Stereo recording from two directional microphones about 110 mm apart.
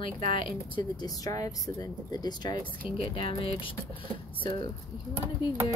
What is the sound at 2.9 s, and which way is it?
Speech, 55° left (ahead or behind).